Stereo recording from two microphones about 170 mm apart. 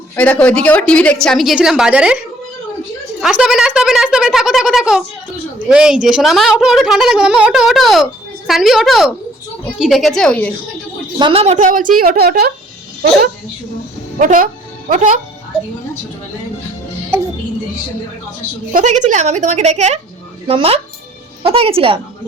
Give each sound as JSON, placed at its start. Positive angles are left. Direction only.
{"t": 0.2, "sound": "a woman's voice", "side_deg": 10}
{"t": 3.2, "sound": "a woman's voice", "side_deg": -5}
{"t": 11.2, "sound": "speech", "side_deg": -35}
{"t": 14.2, "sound": "speech", "side_deg": -50}
{"t": 18.7, "sound": "speech", "side_deg": -45}